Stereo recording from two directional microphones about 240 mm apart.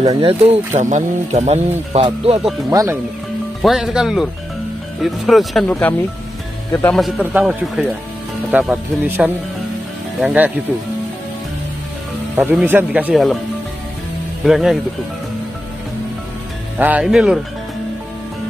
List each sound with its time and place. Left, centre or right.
0.0 s speech: right
3.6 s speech: centre
12.4 s speech: centre
14.4 s speech: centre
16.7 s speech: centre